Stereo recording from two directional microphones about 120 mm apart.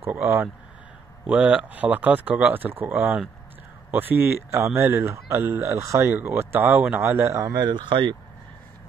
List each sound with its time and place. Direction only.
0.1 s speech: 20° right (ahead or behind); by 8.2 s 40° right (ahead or behind)